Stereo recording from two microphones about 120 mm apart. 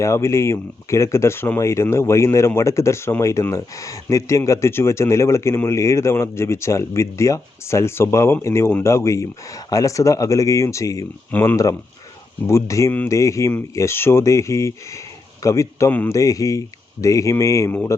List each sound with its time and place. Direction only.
0.0 s speech: 25° left (ahead or behind)
11.3 s speech: 15° left (ahead or behind)
11.5 s speech: 25° left (ahead or behind)
15.9 s speech: 15° left (ahead or behind)
16.1 s speech: 30° left (ahead or behind)